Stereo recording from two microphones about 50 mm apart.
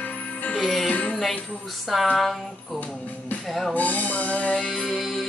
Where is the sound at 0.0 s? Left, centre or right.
Left.